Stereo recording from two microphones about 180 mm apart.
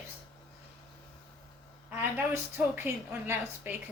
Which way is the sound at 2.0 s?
10° right (ahead or behind).